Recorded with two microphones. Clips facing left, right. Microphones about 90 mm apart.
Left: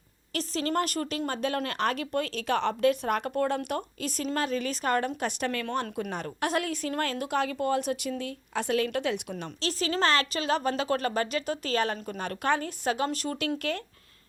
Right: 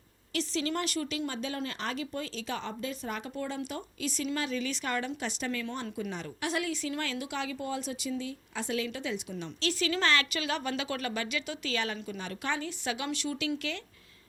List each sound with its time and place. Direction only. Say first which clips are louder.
0.3 s speech: left 3 dB; 45° left (ahead or behind)
9.6 s a woman's voice: left 2 dB; 35° left (ahead or behind)